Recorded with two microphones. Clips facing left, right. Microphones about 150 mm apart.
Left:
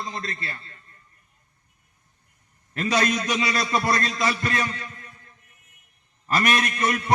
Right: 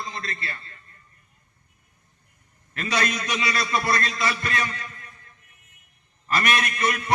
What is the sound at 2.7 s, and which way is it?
A man's voice, 35° left (ahead or behind).